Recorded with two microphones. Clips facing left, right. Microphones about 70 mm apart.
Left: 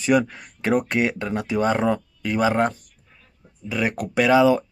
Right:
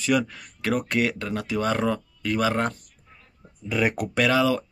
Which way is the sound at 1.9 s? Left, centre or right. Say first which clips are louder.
Left 3 dB; centre.